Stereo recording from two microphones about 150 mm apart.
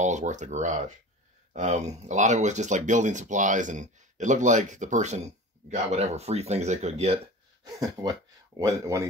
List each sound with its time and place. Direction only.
0.0 s speech: 55° right (ahead or behind)
7.6 s speech: 25° right (ahead or behind)